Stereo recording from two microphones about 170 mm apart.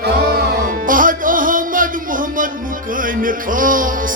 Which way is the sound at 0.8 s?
55° right (ahead or behind).